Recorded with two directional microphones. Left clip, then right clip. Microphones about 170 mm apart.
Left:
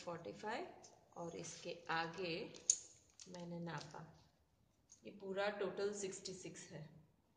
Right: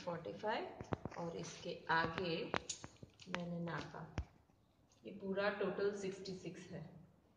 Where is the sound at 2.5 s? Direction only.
5° left (ahead or behind).